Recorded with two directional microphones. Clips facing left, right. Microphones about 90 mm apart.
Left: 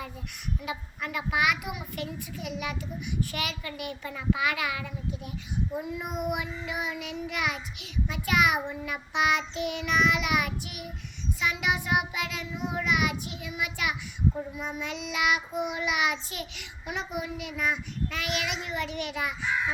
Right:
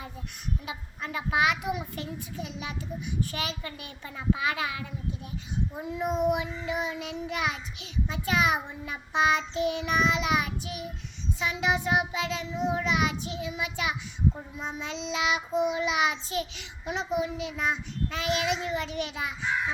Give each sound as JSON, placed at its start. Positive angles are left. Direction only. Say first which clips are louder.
{"t": 0.6, "sound": "a child's voice", "louder": "left 2 dB", "side_deg": -25}